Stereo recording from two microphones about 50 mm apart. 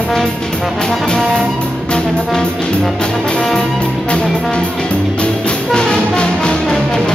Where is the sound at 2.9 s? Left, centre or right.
Centre.